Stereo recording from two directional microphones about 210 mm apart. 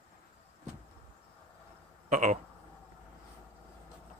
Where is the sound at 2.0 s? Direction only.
35° right (ahead or behind).